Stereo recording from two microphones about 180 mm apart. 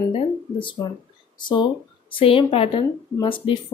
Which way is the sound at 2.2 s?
30° left (ahead or behind).